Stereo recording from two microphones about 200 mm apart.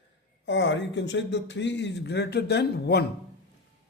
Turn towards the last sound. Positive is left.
turn(degrees=55)  # may be behind; listen again after turning